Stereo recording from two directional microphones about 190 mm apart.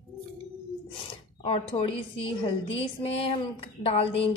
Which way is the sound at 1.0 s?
30° left (ahead or behind).